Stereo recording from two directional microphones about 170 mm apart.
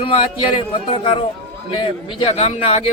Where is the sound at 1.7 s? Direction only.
30° left (ahead or behind).